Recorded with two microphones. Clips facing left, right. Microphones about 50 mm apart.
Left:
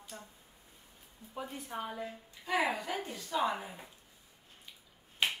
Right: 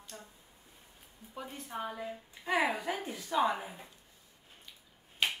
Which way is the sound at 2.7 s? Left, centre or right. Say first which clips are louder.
Right 1 dB; centre.